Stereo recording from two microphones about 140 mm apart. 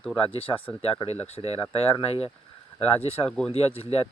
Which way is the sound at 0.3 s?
40° left (ahead or behind).